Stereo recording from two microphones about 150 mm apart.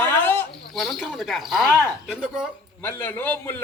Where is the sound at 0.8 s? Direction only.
Centre (ahead or behind).